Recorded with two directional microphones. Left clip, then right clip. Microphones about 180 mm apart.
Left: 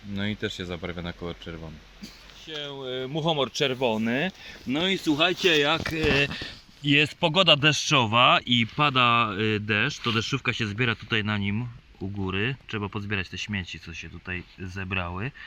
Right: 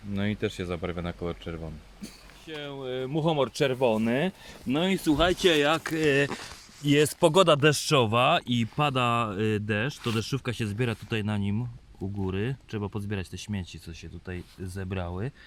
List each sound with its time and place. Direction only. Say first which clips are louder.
0.1 s speech: even; 40° right (ahead or behind)